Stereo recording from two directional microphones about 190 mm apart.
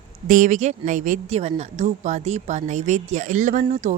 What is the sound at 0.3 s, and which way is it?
A woman's voice, 45° right (ahead or behind).